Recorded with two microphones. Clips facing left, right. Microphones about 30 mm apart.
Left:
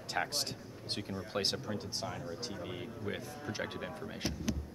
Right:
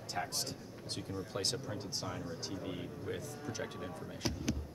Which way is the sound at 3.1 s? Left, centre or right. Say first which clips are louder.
Left 2 dB; left.